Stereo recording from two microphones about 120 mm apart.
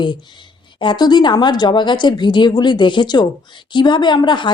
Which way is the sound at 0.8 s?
40° left (ahead or behind).